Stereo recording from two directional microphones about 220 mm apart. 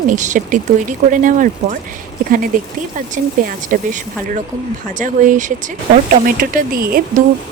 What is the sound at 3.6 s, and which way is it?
Speech, 40° right (ahead or behind).